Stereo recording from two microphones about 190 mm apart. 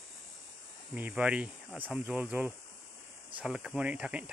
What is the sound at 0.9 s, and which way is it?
Speech, 5° right (ahead or behind).